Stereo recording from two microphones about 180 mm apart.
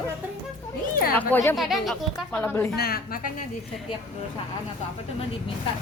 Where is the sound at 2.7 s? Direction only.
60° left (ahead or behind).